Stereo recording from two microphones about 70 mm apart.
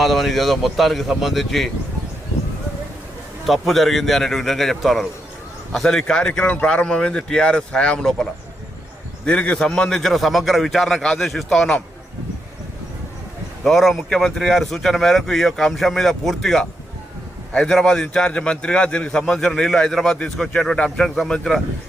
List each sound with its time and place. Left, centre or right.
0.0 s speech: centre
3.4 s speech: centre
6.5 s speech: left
13.7 s speech: centre